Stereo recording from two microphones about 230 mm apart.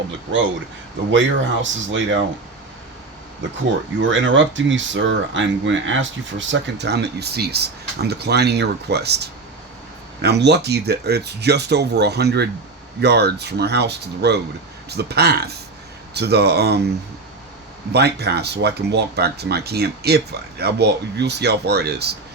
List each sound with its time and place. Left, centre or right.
1.6 s speech: right
3.6 s speech: right
17.9 s speech: right